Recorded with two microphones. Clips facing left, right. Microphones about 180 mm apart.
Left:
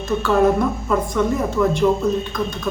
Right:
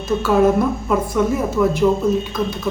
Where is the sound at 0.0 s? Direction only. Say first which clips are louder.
Right 1 dB; 5° right (ahead or behind).